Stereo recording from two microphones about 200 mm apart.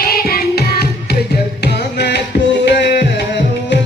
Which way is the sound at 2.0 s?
55° left (ahead or behind).